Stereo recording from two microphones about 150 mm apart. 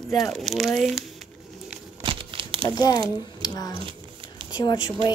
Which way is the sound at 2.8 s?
25° left (ahead or behind).